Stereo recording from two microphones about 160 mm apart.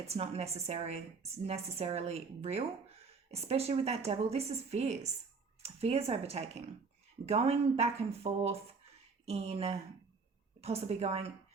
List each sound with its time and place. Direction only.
0.0 s a woman's voice: 40° right (ahead or behind)